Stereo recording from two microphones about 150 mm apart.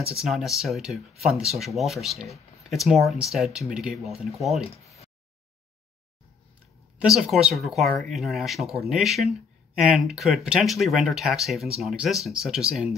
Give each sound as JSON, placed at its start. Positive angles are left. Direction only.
{"t": 0.2, "sound": "speech", "side_deg": 0}
{"t": 7.0, "sound": "speech", "side_deg": 0}